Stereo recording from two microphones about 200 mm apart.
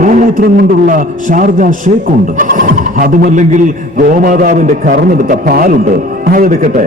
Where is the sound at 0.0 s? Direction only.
40° right (ahead or behind).